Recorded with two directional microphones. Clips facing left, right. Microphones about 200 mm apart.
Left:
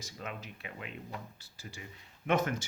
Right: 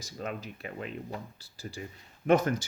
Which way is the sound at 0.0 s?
40° right (ahead or behind).